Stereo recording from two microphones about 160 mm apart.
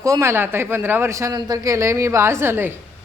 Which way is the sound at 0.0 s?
20° right (ahead or behind).